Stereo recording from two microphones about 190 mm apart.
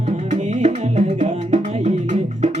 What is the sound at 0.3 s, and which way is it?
Music, 35° right (ahead or behind).